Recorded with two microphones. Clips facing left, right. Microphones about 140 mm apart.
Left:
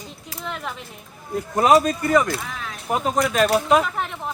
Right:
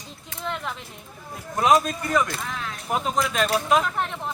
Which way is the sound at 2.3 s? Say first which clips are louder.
Left 2 dB; 5° left (ahead or behind).